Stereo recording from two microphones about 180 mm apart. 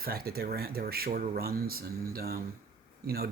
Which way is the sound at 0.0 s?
60° right (ahead or behind).